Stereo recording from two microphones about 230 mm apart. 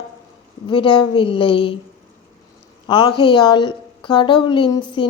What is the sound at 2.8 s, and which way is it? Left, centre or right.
A man's voice, centre.